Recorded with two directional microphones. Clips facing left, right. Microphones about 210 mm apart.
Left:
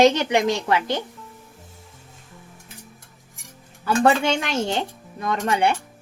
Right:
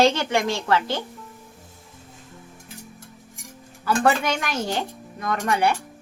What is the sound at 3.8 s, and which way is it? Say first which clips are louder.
Speech: left 2 dB; 25° left (ahead or behind).